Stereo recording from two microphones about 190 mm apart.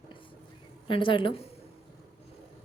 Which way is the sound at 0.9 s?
25° left (ahead or behind).